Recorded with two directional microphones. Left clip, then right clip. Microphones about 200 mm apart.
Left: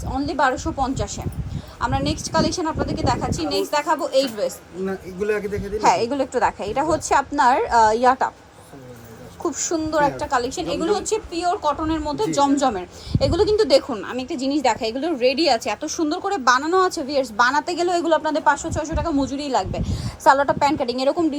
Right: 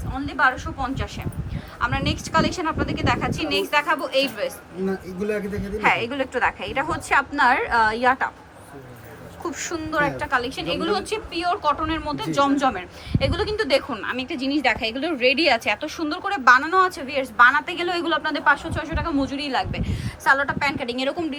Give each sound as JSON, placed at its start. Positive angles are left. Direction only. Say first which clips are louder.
{"t": 0.1, "sound": "speech", "louder": "left 1 dB", "side_deg": 35}
{"t": 1.8, "sound": "a woman's voice", "louder": "left 1 dB", "side_deg": 20}
{"t": 4.9, "sound": "a man's voice", "louder": "left 3 dB", "side_deg": 5}
{"t": 5.8, "sound": "a woman's voice", "louder": "left 3 dB", "side_deg": 25}
{"t": 9.4, "sound": "a woman's voice", "louder": "left 5 dB", "side_deg": 30}